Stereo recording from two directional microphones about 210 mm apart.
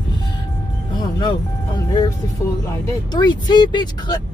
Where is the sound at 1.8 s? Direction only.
20° left (ahead or behind).